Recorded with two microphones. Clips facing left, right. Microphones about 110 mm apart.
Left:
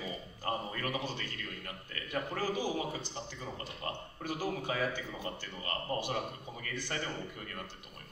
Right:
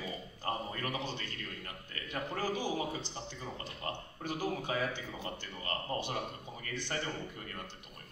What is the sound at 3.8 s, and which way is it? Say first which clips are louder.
Speech: even; 25° left (ahead or behind).